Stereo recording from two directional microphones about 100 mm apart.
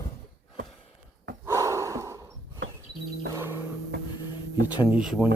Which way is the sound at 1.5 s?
30° right (ahead or behind).